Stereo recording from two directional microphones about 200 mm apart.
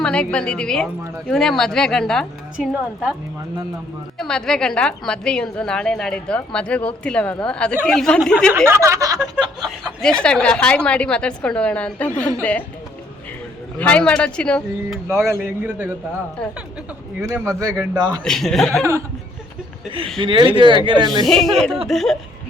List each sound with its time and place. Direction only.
0.0 s a woman's voice: 5° left (ahead or behind)
4.2 s a woman's voice: 5° left (ahead or behind)
8.5 s a man's voice: 15° right (ahead or behind)
10.0 s a woman's voice: 5° left (ahead or behind)
13.7 s a woman's voice: 5° left (ahead or behind)
15.1 s a man's voice: 15° right (ahead or behind)
17.2 s a man's voice: 15° right (ahead or behind)
18.1 s a woman's voice: 5° left (ahead or behind)
20.1 s speech: 25° right (ahead or behind)
21.2 s a woman's voice: centre (ahead or behind)